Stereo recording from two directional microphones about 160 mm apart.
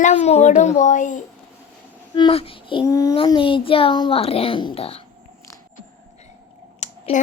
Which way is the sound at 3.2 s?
30° left (ahead or behind).